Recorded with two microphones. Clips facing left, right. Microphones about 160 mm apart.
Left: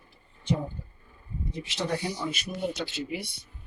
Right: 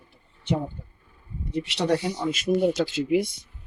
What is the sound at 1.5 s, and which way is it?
Speech, 70° right (ahead or behind).